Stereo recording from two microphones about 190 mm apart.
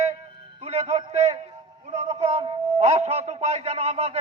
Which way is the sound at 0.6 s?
35° right (ahead or behind).